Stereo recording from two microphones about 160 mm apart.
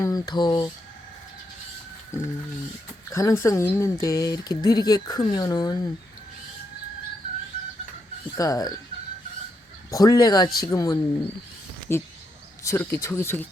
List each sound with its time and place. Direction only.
0.0 s speech: 25° left (ahead or behind)
2.1 s speech: 20° left (ahead or behind)
8.4 s speech: 20° left (ahead or behind)
9.9 s speech: 20° left (ahead or behind)